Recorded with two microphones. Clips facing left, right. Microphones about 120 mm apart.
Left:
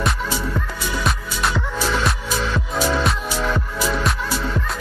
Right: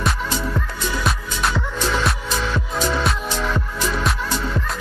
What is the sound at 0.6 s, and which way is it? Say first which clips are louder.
Music: even; centre (ahead or behind).